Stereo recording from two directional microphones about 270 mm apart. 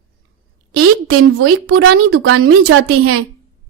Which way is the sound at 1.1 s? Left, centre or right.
Right.